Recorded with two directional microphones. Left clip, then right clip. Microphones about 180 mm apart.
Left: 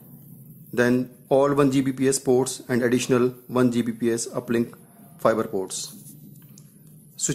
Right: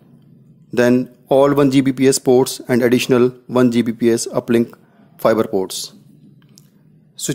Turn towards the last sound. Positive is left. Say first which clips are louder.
# right 5 dB
turn(degrees=-35)  # may be behind; listen again after turning